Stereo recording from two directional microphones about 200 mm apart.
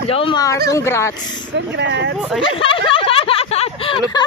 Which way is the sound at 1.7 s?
60° right (ahead or behind).